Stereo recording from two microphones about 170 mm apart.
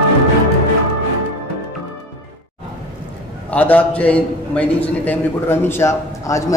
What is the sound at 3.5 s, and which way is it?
A man's voice, 10° left (ahead or behind).